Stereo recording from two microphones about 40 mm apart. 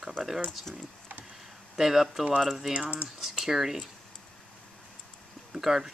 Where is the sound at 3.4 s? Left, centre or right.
Centre.